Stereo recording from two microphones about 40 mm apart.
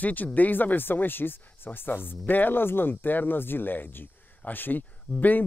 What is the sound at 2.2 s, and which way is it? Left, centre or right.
Speech, left.